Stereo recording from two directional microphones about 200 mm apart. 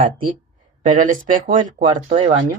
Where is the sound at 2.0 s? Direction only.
30° right (ahead or behind).